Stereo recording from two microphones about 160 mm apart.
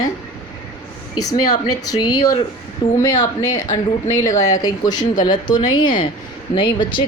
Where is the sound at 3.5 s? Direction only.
50° left (ahead or behind).